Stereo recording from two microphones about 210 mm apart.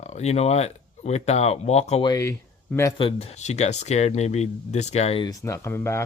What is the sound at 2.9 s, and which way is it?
Speech, 25° left (ahead or behind).